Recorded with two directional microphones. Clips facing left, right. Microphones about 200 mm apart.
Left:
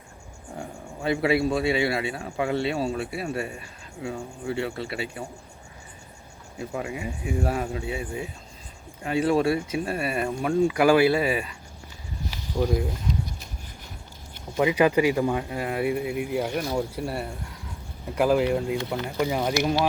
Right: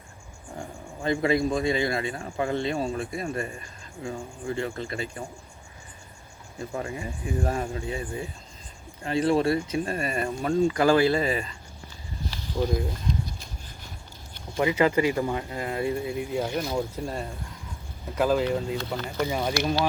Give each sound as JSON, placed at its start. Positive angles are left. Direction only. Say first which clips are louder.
{"t": 1.0, "sound": "speech", "louder": "left 1 dB", "side_deg": 5}
{"t": 6.6, "sound": "speech", "louder": "left 1 dB", "side_deg": 10}
{"t": 12.3, "sound": "a sound", "louder": "left 2 dB", "side_deg": 10}
{"t": 14.5, "sound": "speech", "louder": "left 2 dB", "side_deg": 15}